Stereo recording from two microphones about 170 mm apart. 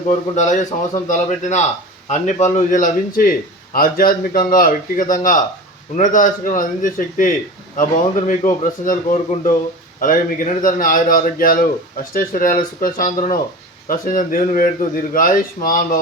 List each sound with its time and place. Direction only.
0.3 s a man's voice: 45° left (ahead or behind)